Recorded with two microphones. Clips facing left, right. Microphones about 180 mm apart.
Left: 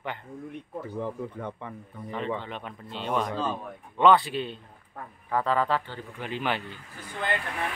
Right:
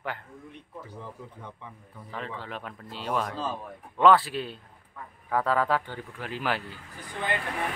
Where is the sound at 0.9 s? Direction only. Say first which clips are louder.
Left 10 dB; 60° left (ahead or behind).